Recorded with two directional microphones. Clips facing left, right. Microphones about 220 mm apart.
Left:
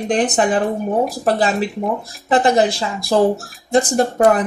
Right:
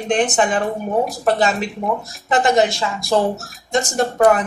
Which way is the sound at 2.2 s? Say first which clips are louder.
Left 1 dB; 35° left (ahead or behind).